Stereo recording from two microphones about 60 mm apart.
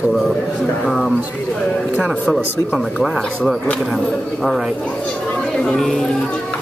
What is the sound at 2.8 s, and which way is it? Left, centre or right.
Speech, centre.